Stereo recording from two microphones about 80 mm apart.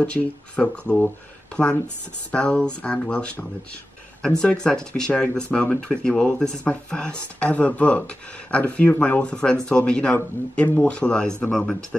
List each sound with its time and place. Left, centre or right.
0.0 s speech: centre
2.3 s speech: centre